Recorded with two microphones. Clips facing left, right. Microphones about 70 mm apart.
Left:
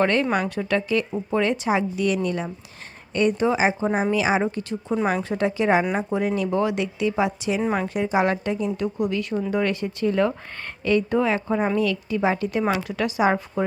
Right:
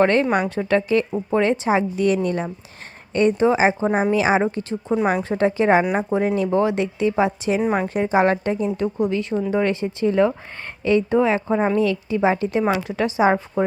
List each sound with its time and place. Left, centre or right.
0.0 s a woman's voice: right